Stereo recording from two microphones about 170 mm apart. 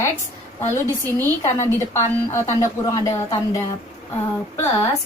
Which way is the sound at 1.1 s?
15° left (ahead or behind).